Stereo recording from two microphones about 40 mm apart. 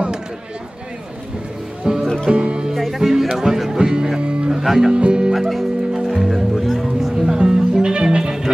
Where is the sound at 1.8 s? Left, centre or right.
Centre.